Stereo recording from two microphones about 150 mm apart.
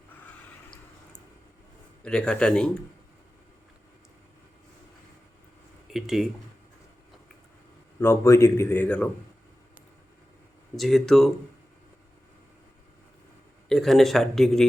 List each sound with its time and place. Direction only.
2.0 s a man's voice: 5° left (ahead or behind)
5.9 s speech: centre (ahead or behind)
7.9 s a man's voice: 15° left (ahead or behind)
10.8 s speech: centre (ahead or behind)
13.7 s speech: centre (ahead or behind)